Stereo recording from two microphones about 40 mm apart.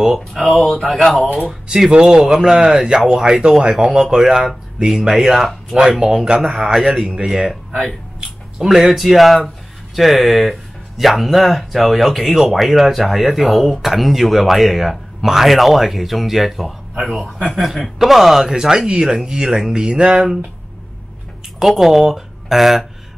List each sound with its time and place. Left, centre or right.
0.3 s speech: centre
1.1 s speech: left
1.4 s speech: centre
5.8 s speech: centre
21.5 s speech: centre